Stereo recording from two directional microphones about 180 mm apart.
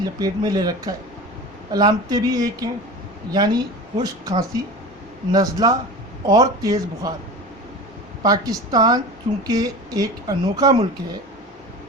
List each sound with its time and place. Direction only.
0.0 s a woman's voice: 20° right (ahead or behind)
8.2 s a woman's voice: 20° right (ahead or behind)